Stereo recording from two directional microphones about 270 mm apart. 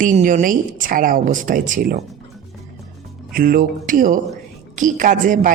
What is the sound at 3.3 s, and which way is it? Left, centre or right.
Speech, right.